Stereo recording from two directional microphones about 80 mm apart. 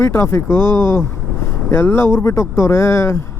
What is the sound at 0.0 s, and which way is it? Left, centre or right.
Speech, left.